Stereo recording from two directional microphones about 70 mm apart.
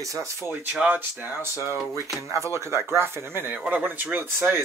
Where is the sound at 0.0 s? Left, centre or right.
Right.